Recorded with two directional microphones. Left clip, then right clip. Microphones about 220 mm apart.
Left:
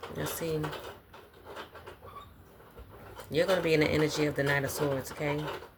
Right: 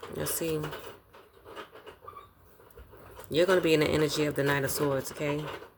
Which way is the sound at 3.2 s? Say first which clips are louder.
Right 3 dB; 50° right (ahead or behind).